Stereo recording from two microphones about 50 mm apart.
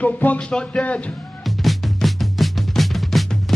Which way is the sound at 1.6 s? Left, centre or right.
Centre.